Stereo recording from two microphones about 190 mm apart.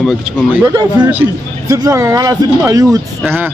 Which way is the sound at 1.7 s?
20° right (ahead or behind).